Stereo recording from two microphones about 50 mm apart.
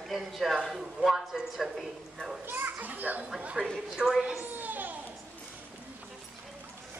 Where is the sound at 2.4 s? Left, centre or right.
Right.